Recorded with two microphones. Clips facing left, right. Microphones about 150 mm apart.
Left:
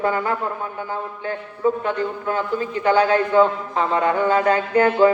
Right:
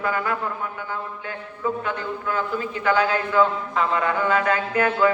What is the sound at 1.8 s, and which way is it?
A man's voice, 35° left (ahead or behind).